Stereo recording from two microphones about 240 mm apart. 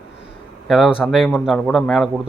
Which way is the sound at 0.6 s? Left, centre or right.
Centre.